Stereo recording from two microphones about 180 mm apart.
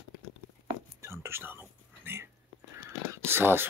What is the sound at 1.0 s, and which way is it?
Whispering, 15° right (ahead or behind).